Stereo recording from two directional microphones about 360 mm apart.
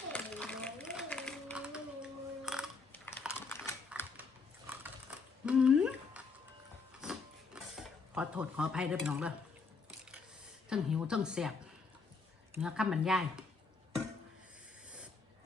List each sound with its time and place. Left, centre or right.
0.1 s a sound: centre
4.2 s biting: centre
5.5 s a sound: centre
7.0 s mechanisms: centre
10.7 s a woman's voice: centre
12.5 s a woman's voice: centre